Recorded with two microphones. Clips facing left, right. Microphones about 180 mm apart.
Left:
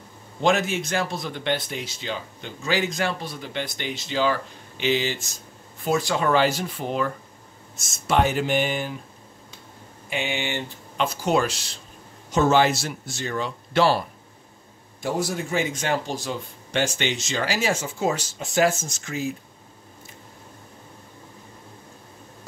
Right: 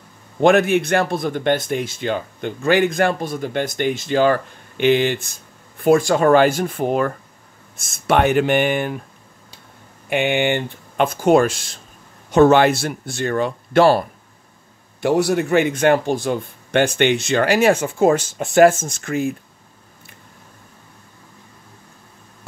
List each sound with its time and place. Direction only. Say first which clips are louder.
0.4 s speech: right 8 dB; 55° right (ahead or behind)
10.0 s speech: right 10 dB; 60° right (ahead or behind)
15.0 s speech: right 9 dB; 65° right (ahead or behind)